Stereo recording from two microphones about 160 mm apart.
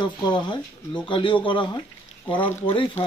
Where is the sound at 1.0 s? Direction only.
30° left (ahead or behind).